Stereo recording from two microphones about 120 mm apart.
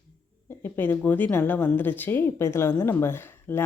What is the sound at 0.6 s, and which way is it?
Speech, 15° left (ahead or behind).